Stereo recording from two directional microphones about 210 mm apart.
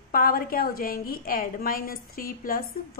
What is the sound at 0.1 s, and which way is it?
A woman's voice, 45° left (ahead or behind).